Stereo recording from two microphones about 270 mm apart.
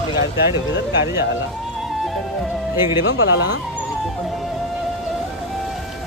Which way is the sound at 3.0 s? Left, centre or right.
Left.